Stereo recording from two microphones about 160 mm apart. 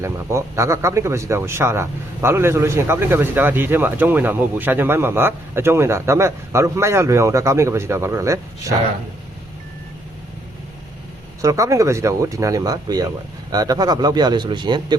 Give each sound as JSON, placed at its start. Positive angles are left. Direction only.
{"t": 0.0, "sound": "a man's voice", "side_deg": -15}
{"t": 11.4, "sound": "speech", "side_deg": -20}